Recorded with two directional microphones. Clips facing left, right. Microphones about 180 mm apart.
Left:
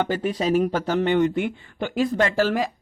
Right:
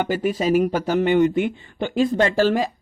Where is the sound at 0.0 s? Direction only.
10° right (ahead or behind).